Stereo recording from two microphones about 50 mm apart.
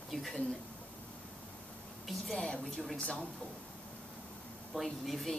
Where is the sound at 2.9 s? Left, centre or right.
Left.